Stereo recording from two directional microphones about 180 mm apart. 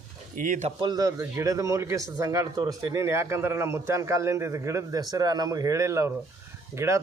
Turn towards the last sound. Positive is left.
turn(degrees=-15)  # may be behind; listen again after turning